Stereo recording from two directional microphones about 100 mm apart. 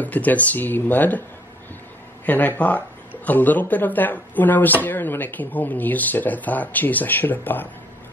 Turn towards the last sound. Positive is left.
turn(degrees=20)  # may be behind; listen again after turning